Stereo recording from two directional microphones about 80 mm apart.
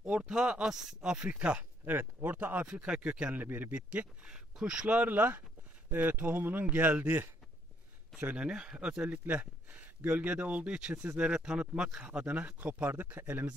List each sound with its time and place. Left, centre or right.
0.0 s speech: centre